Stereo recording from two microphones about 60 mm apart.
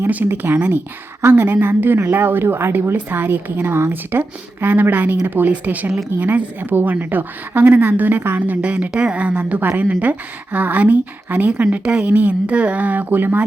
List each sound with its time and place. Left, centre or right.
0.3 s a woman's voice: right; by 12.0 s centre
12.0 s a woman's voice: right